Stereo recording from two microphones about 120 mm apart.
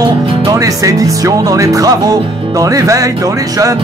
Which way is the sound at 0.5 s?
30° right (ahead or behind).